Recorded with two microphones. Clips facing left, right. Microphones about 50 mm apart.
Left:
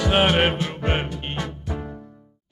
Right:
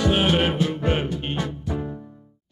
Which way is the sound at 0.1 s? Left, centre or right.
Left.